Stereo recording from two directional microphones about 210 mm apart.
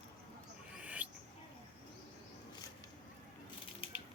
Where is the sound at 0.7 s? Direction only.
5° right (ahead or behind).